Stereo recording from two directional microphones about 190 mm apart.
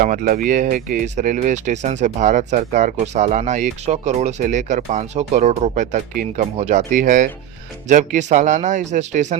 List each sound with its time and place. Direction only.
0.0 s speech: 50° right (ahead or behind)